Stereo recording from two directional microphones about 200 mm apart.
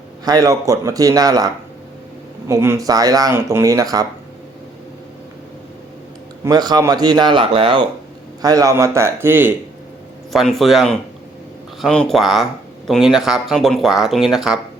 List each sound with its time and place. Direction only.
0.3 s speech: 15° right (ahead or behind)
2.5 s speech: 15° right (ahead or behind)
6.4 s speech: 20° right (ahead or behind); by 14.6 s centre (ahead or behind)